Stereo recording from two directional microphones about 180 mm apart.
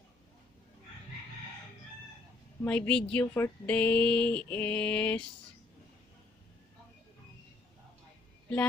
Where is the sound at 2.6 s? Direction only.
5° left (ahead or behind).